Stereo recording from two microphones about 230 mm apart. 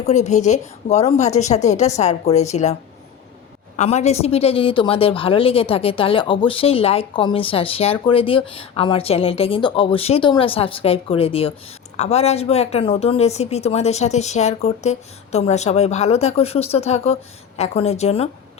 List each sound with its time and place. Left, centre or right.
0.0 s a woman's voice: left
3.8 s a woman's voice: left